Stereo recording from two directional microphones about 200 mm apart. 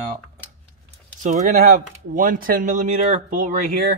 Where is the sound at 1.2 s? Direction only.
40° right (ahead or behind).